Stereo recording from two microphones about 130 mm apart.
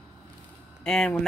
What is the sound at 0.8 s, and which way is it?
Speech, 5° left (ahead or behind).